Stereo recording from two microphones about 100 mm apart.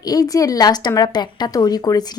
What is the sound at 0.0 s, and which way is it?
A woman's voice, 40° left (ahead or behind).